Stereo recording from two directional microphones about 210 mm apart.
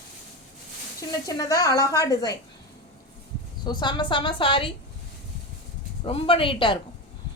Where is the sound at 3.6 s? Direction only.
20° left (ahead or behind).